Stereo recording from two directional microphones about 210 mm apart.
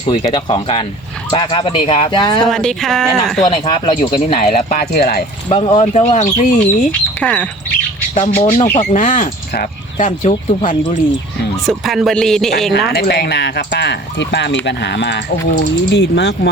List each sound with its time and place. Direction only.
0.0 s speech: 25° left (ahead or behind)
2.4 s speech: 5° left (ahead or behind)
3.4 s speech: 25° left (ahead or behind); by 5.2 s 45° left (ahead or behind)
5.5 s speech: 25° left (ahead or behind)
7.2 s speech: 5° left (ahead or behind)
8.1 s speech: 30° left (ahead or behind)
10.1 s speech: 25° left (ahead or behind)
11.6 s speech: centre (ahead or behind)
12.9 s speech: 50° left (ahead or behind)